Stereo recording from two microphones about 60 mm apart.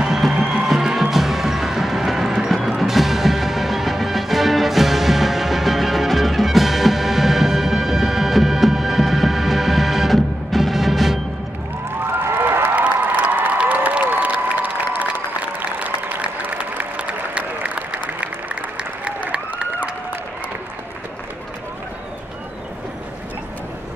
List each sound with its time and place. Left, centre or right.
0.0 s music: centre
12.1 s a sound: right
12.7 s applause: right